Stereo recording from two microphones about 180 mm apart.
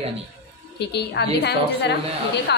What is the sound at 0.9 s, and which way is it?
A woman's voice, 65° left (ahead or behind).